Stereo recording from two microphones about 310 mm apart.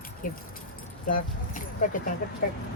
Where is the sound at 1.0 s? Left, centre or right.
Left.